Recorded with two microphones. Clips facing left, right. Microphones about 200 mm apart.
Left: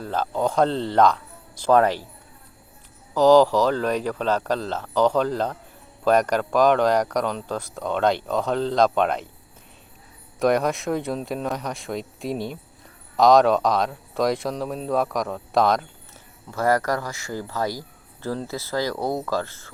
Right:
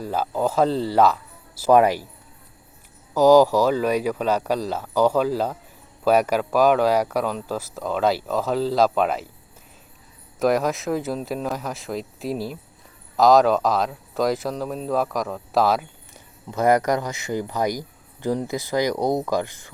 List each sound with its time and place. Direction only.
0.0 s speech: 10° right (ahead or behind)
3.2 s speech: 10° right (ahead or behind)
10.4 s speech: centre (ahead or behind)
16.1 s speech: 20° right (ahead or behind)